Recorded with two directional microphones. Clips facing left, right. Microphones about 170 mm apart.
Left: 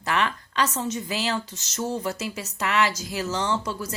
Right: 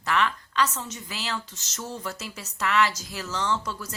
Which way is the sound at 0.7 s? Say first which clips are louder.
Left 8 dB; 20° left (ahead or behind).